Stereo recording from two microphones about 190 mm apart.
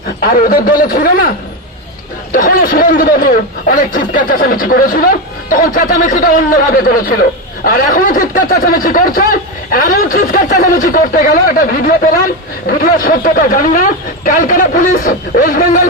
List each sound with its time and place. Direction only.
0.2 s a man's voice: 50° left (ahead or behind)
2.3 s a man's voice: 45° left (ahead or behind)